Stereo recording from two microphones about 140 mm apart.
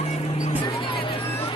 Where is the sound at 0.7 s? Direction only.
35° left (ahead or behind).